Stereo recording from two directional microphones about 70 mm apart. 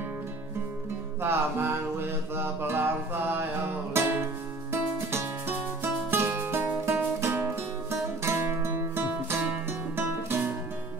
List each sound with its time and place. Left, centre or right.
1.2 s music: right